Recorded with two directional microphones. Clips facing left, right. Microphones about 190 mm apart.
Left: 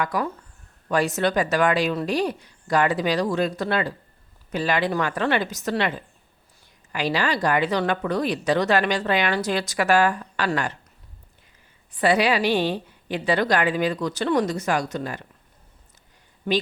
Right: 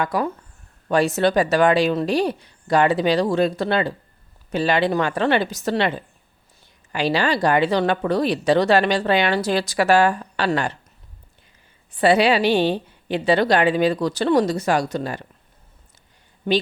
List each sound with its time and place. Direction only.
0.0 s speech: 30° right (ahead or behind)
6.9 s speech: 30° right (ahead or behind)
11.9 s speech: 30° right (ahead or behind)